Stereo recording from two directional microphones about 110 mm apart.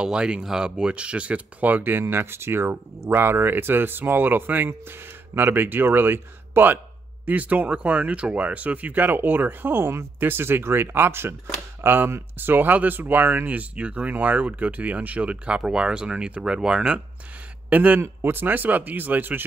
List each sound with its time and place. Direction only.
0.0 s speech: 10° right (ahead or behind)